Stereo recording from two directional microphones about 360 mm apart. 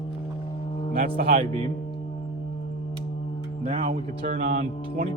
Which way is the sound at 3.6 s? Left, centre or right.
Centre.